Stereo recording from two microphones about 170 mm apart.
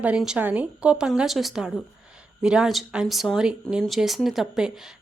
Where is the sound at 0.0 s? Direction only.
5° right (ahead or behind).